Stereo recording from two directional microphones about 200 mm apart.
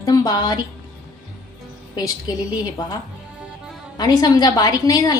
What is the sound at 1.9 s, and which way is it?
Speech, 20° left (ahead or behind).